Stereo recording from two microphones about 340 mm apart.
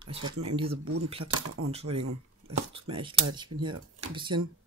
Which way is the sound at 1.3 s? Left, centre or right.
Right.